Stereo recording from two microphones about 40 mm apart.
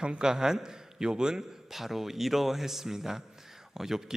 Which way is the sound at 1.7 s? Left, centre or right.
Centre.